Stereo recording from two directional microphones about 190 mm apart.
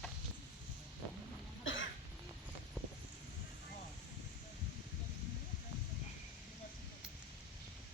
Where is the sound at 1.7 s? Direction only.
90° left.